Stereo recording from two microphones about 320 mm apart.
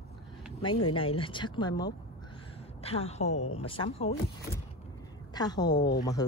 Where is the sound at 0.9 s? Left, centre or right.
Centre.